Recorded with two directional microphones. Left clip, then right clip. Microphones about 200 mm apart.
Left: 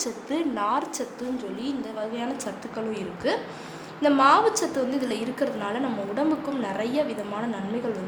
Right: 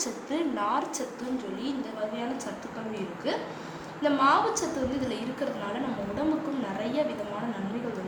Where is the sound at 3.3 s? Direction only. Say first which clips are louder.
Left 5 dB; 55° left (ahead or behind).